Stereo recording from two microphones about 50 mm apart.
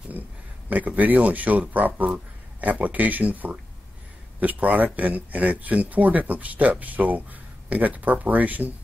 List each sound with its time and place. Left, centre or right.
0.7 s speech: right